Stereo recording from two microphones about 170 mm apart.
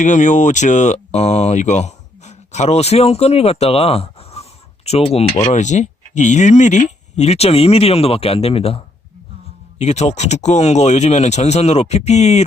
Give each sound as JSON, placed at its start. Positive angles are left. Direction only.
{"t": 0.0, "sound": "speech", "side_deg": 45}